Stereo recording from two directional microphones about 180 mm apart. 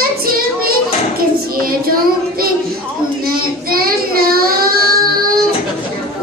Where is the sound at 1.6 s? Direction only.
55° right (ahead or behind).